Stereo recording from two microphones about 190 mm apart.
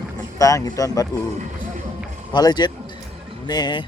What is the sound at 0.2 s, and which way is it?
Speech, 15° left (ahead or behind).